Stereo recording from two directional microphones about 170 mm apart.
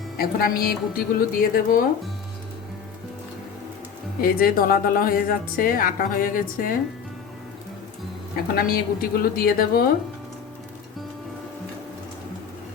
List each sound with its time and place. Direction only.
0.2 s a woman's voice: 60° left (ahead or behind)
4.2 s a woman's voice: 60° left (ahead or behind)
8.5 s a woman's voice: 60° left (ahead or behind)